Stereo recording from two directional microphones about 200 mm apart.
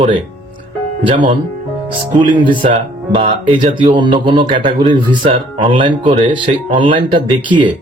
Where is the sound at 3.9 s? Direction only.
25° right (ahead or behind).